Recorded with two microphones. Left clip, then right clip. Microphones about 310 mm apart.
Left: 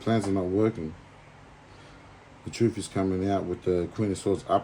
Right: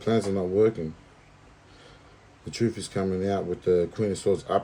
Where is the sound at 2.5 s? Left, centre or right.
Centre.